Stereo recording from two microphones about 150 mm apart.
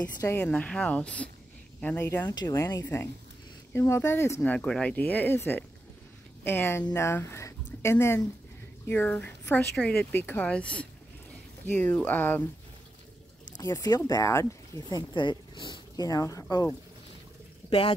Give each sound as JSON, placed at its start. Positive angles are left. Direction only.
{"t": 0.4, "sound": "speech", "side_deg": 10}
{"t": 2.2, "sound": "speech", "side_deg": 25}
{"t": 4.4, "sound": "speech", "side_deg": 5}
{"t": 13.6, "sound": "speech", "side_deg": 20}
{"t": 17.6, "sound": "speech", "side_deg": 40}